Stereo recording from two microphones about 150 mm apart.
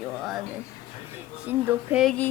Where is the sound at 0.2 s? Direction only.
Centre (ahead or behind).